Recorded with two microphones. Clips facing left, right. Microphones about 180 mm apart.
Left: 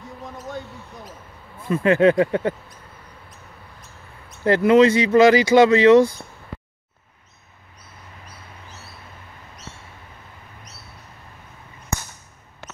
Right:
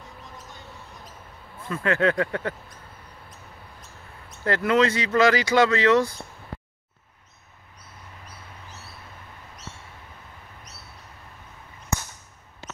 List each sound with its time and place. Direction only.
1.7 s speech: 20° left (ahead or behind)
4.5 s speech: 20° left (ahead or behind)